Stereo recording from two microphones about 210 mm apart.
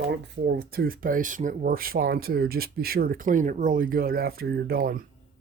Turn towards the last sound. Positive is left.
turn(degrees=-45)  # may be behind; listen again after turning